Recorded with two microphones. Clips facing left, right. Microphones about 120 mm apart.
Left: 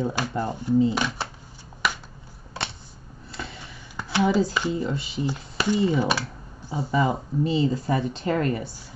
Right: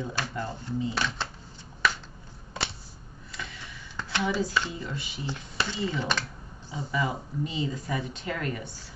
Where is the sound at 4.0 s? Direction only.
10° left (ahead or behind).